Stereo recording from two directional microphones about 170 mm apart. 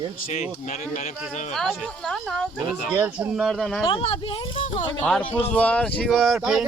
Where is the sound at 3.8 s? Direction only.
30° left (ahead or behind).